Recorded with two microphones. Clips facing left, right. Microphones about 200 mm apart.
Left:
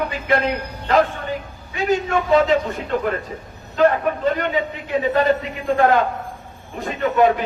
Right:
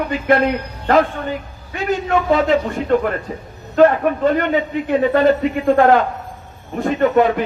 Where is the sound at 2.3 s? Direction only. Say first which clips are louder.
Left 1 dB; 55° right (ahead or behind).